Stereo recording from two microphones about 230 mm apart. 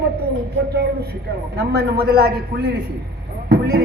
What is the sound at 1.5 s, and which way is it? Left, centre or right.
A man's voice, right.